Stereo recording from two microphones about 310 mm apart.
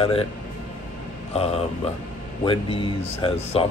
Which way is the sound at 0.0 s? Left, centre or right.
Centre.